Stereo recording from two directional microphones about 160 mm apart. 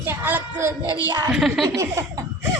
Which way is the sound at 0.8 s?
20° left (ahead or behind).